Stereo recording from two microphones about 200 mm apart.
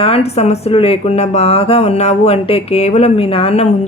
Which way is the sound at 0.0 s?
30° left (ahead or behind).